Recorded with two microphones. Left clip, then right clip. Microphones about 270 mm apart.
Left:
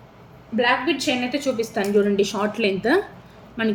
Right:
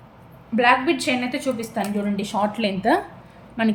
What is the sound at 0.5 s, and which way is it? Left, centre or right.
A woman's voice, centre.